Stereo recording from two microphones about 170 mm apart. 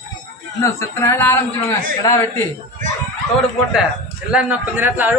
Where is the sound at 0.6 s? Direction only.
15° left (ahead or behind).